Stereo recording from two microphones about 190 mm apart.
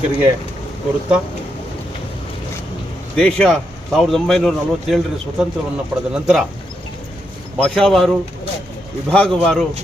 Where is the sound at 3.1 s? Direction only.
5° left (ahead or behind).